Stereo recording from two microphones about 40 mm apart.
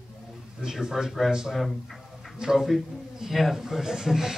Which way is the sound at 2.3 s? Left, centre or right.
Centre.